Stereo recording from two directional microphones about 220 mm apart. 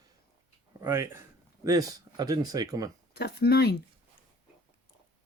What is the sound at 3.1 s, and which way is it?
Speech, 45° left (ahead or behind).